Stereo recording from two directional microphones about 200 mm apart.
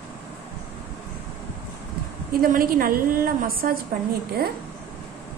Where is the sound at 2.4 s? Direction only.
45° right (ahead or behind).